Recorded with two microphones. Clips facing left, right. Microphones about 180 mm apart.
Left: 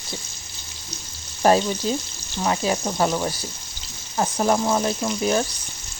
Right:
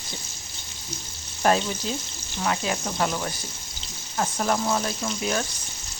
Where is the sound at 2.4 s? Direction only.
30° left (ahead or behind).